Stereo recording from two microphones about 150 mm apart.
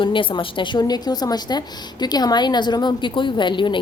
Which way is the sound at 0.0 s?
35° left (ahead or behind).